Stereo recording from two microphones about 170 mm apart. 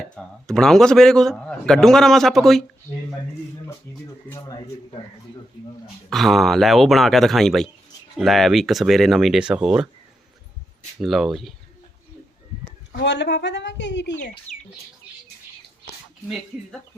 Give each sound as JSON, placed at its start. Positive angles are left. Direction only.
{"t": 0.4, "sound": "a man's voice", "side_deg": 5}
{"t": 3.9, "sound": "speech", "side_deg": 15}
{"t": 6.1, "sound": "a man's voice", "side_deg": 0}
{"t": 11.0, "sound": "a man's voice", "side_deg": 0}
{"t": 12.9, "sound": "a woman's voice", "side_deg": 90}